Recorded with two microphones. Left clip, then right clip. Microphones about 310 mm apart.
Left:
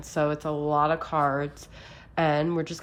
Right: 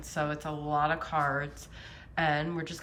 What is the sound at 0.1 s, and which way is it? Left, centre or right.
Speech, centre.